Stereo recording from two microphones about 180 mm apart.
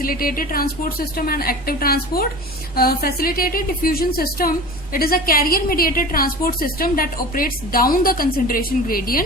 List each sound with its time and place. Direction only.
0.0 s a woman's voice: 55° left (ahead or behind)